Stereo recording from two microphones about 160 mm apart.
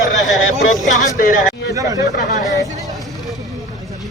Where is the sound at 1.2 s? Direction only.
60° left (ahead or behind).